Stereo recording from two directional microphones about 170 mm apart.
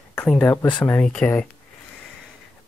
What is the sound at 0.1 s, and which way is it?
Speech, 10° left (ahead or behind).